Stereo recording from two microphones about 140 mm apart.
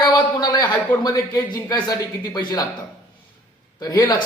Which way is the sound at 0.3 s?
30° left (ahead or behind).